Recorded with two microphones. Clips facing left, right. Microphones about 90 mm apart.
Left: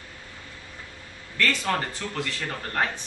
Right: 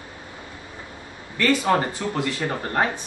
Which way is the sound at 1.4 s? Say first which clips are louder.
Right 6 dB; 15° right (ahead or behind).